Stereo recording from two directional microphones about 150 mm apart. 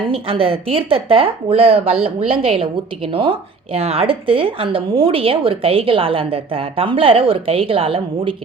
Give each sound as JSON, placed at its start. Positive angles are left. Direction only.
{"t": 0.1, "sound": "a woman's voice", "side_deg": -40}